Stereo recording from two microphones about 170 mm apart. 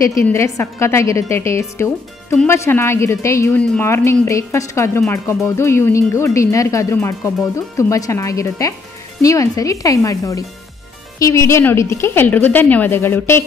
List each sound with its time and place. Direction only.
0.0 s a woman's voice: 15° left (ahead or behind)